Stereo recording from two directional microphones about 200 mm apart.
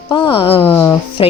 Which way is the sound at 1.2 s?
25° left (ahead or behind).